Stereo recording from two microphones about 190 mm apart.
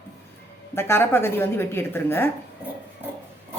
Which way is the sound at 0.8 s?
10° left (ahead or behind).